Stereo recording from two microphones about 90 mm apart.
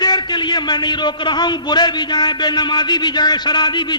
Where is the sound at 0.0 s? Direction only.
55° left (ahead or behind).